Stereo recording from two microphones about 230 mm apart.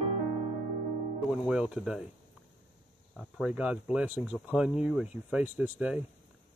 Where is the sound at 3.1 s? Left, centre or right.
Centre.